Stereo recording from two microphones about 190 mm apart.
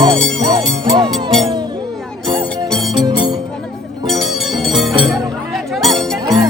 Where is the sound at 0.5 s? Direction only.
25° right (ahead or behind).